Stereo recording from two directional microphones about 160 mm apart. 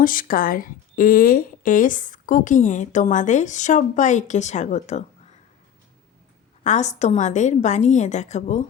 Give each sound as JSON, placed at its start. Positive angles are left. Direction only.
{"t": 0.0, "sound": "speech", "side_deg": 60}
{"t": 6.7, "sound": "speech", "side_deg": 45}